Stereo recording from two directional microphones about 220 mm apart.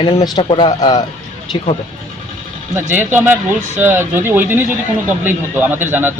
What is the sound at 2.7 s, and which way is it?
Speech, 10° right (ahead or behind).